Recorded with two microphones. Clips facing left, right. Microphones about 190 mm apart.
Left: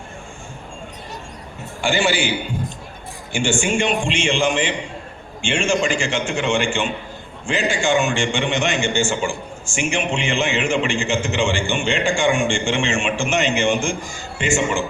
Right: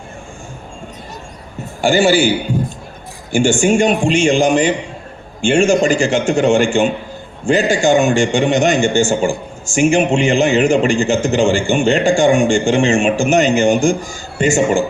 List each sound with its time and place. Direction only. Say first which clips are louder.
1.8 s a man's voice: right 8 dB; 40° right (ahead or behind)
3.3 s a man's voice: right 8 dB; 40° right (ahead or behind)